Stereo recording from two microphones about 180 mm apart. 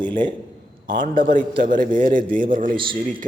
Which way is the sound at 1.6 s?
50° right (ahead or behind).